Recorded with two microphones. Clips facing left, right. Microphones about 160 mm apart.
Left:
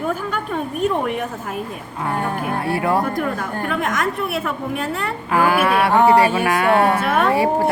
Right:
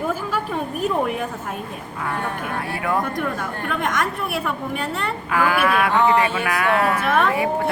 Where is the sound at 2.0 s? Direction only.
30° left (ahead or behind).